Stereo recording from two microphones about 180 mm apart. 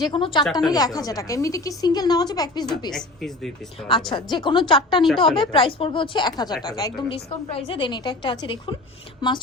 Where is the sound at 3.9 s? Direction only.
25° left (ahead or behind).